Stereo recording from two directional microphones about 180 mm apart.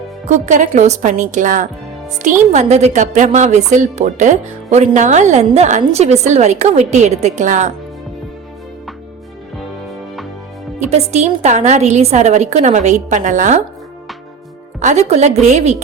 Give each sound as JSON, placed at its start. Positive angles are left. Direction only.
{"t": 0.3, "sound": "a woman's voice", "side_deg": -40}
{"t": 10.8, "sound": "a woman's voice", "side_deg": -35}
{"t": 14.8, "sound": "a woman's voice", "side_deg": -40}